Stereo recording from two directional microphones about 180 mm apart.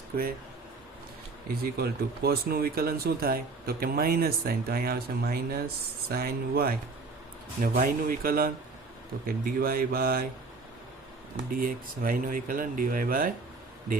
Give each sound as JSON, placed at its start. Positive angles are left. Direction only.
{"t": 0.1, "sound": "speech", "side_deg": -55}
{"t": 1.8, "sound": "speech", "side_deg": -60}
{"t": 11.5, "sound": "speech", "side_deg": -50}